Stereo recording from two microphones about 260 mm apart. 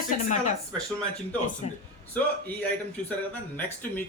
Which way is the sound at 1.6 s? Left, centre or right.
Left.